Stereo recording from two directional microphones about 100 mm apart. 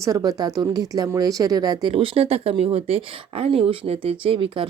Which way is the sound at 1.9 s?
70° right (ahead or behind).